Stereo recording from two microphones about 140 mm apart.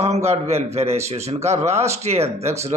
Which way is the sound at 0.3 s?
50° right (ahead or behind).